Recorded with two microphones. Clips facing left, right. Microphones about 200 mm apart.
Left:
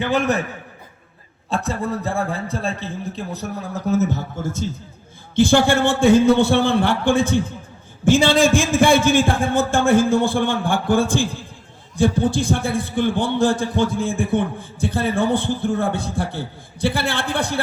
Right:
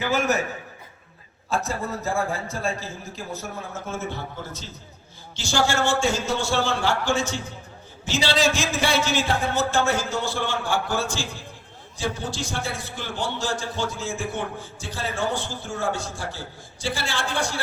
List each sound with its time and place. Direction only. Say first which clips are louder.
1.5 s a man's voice: left 4 dB; 30° left (ahead or behind); by 17.6 s 60° left (ahead or behind)